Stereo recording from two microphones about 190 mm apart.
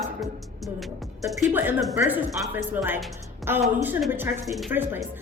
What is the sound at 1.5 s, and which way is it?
A woman's voice, 10° right (ahead or behind).